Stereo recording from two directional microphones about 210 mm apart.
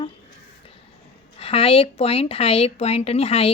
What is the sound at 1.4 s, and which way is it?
Speech, 25° left (ahead or behind).